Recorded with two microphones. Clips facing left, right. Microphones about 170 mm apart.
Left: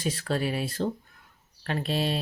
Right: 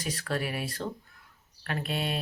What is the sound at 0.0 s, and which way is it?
Speech, 25° left (ahead or behind).